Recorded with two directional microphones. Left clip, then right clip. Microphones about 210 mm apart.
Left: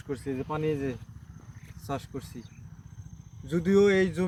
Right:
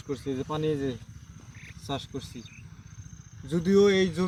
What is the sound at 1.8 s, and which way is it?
Speech, 25° right (ahead or behind).